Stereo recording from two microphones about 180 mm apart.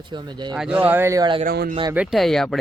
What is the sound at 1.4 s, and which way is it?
Speech, 60° right (ahead or behind).